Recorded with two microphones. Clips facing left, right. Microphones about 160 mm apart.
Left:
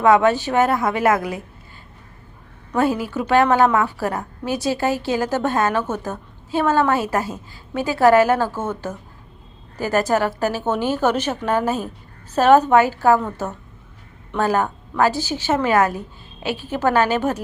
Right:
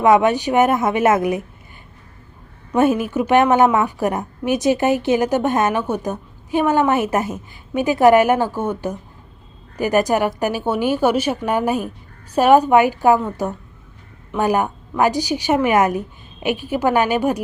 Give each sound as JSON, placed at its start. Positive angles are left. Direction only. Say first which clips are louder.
{"t": 0.0, "sound": "a woman's voice", "louder": "right 1 dB", "side_deg": -20}
{"t": 2.7, "sound": "a woman's voice", "louder": "right 4 dB", "side_deg": -20}